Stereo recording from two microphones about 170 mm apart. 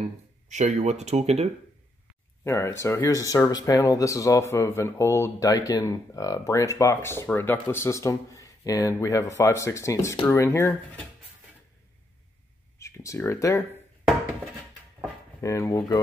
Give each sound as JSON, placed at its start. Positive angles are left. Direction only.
{"t": 0.5, "sound": "speech", "side_deg": -45}
{"t": 2.4, "sound": "speech", "side_deg": 15}
{"t": 12.7, "sound": "speech", "side_deg": 15}
{"t": 15.4, "sound": "speech", "side_deg": 15}